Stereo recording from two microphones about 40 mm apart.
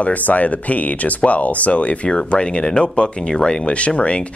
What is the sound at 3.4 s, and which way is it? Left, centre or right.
Speech, left.